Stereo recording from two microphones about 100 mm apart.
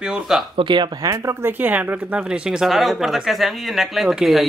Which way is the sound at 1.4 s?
15° right (ahead or behind).